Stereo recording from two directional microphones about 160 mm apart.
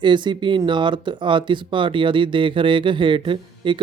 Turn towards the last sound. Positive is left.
turn(degrees=-30)  # may be behind; listen again after turning